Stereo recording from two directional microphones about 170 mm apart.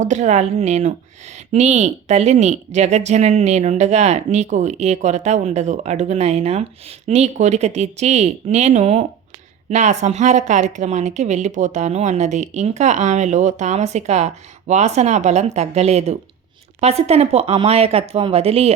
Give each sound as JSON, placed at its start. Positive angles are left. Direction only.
{"t": 0.0, "sound": "a woman's voice", "side_deg": -45}